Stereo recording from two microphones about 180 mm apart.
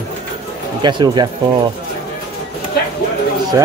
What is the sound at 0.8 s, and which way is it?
Speech, 25° right (ahead or behind).